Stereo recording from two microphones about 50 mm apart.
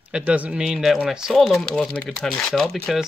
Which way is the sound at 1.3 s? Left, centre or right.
Centre.